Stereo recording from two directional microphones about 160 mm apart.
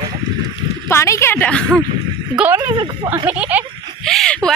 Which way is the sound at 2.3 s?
10° right (ahead or behind).